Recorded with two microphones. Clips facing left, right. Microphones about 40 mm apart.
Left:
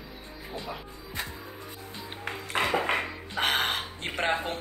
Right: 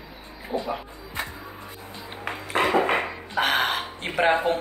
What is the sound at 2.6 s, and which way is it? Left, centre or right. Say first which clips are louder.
Dishes: right 5 dB; centre.